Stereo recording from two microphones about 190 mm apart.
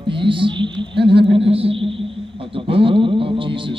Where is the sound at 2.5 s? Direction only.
30° right (ahead or behind).